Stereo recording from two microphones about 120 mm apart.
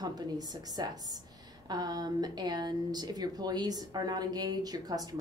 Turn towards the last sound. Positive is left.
turn(degrees=-30)  # may be behind; listen again after turning